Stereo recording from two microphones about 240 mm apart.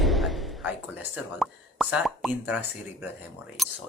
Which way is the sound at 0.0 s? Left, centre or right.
Centre.